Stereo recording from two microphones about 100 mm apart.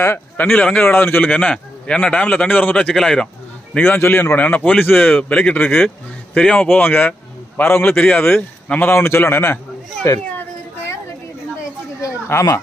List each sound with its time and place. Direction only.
0.3 s a man's voice: 10° left (ahead or behind)
3.8 s a man's voice: 20° left (ahead or behind)
12.0 s a sound: 30° left (ahead or behind)